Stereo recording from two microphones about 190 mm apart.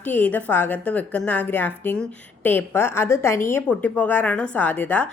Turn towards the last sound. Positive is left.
turn(degrees=10)  # may be behind; listen again after turning